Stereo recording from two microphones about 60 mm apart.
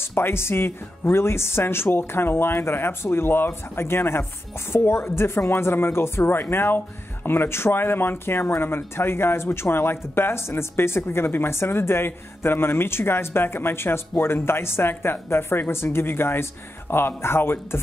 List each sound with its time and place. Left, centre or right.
0.0 s speech: left